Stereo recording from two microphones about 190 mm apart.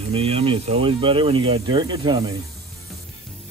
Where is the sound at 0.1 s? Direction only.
30° right (ahead or behind).